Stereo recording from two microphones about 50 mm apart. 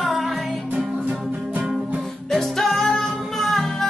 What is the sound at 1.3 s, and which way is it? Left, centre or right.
Music, right.